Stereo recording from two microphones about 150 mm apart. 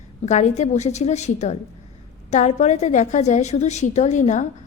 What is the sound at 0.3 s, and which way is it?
A woman's voice, 50° left (ahead or behind).